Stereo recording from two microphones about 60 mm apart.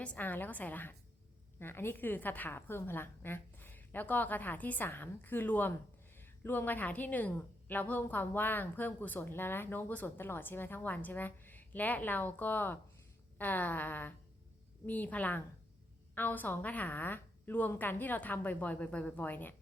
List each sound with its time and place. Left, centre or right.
0.0 s a woman's voice: left